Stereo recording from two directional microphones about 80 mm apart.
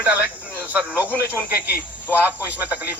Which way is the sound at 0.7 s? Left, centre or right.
Centre.